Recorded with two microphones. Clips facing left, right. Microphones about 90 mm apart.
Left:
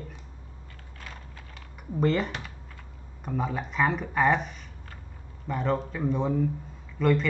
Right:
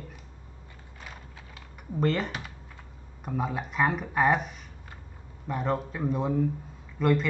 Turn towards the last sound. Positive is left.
turn(degrees=-5)  # may be behind; listen again after turning